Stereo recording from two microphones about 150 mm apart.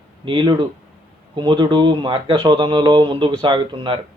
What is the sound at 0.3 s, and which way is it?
Speech, 30° right (ahead or behind).